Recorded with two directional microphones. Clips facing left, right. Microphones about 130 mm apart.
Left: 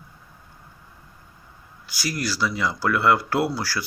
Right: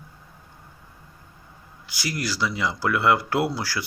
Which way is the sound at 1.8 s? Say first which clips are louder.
Left 1 dB; 20° right (ahead or behind).